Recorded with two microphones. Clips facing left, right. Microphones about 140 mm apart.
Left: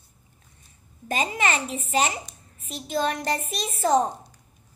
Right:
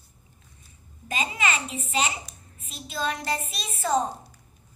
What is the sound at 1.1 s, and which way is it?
Speech, 45° left (ahead or behind).